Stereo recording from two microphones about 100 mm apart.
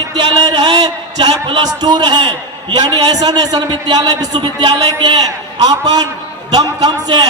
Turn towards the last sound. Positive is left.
turn(degrees=-40)  # may be behind; listen again after turning